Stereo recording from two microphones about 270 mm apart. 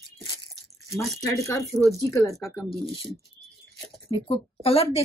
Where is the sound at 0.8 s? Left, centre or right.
Centre.